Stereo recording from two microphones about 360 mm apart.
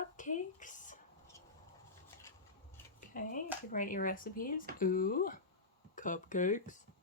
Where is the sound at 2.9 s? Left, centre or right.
Left.